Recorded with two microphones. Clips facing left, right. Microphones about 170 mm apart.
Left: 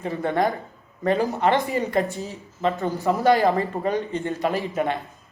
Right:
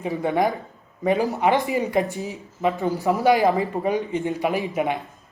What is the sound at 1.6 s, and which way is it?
Speech, 15° right (ahead or behind).